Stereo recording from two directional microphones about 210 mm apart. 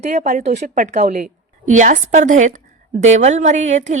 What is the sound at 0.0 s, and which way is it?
A woman's voice, 35° right (ahead or behind).